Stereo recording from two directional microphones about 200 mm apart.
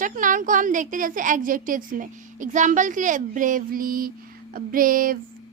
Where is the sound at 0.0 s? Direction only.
40° right (ahead or behind).